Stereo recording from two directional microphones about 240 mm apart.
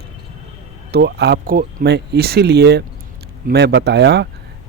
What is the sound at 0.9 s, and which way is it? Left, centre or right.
A man's voice, right.